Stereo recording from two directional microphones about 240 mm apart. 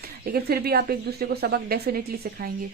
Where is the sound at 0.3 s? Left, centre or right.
Right.